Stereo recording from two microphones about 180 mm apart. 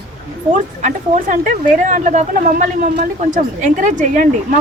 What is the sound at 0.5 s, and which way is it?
A woman's voice, 40° right (ahead or behind).